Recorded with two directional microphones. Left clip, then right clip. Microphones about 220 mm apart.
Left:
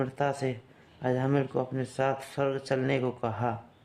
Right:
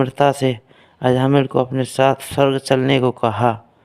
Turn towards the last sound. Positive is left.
turn(degrees=-40)  # may be behind; listen again after turning